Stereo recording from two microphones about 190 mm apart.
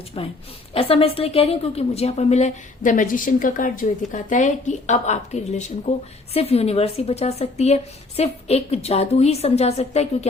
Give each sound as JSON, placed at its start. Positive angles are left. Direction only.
{"t": 0.1, "sound": "a woman's voice", "side_deg": 30}